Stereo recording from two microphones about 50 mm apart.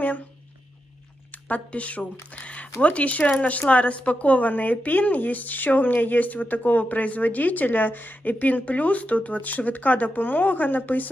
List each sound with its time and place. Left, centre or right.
1.5 s speech: left
2.3 s a sound: left
2.8 s a woman's voice: left